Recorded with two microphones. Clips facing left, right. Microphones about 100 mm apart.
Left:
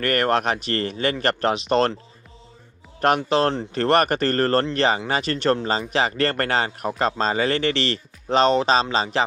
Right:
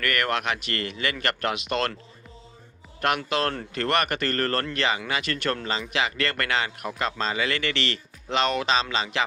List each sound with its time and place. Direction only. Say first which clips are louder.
0.0 s speech: left 6 dB; 35° left (ahead or behind)
3.0 s speech: left 6 dB; 35° left (ahead or behind)